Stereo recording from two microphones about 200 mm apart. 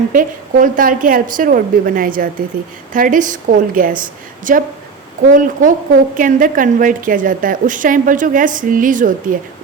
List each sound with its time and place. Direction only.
0.1 s a woman's voice: 45° right (ahead or behind)